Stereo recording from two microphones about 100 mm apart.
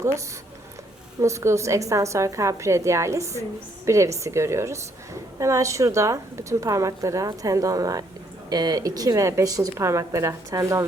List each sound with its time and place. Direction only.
1.2 s a woman's voice: 30° right (ahead or behind)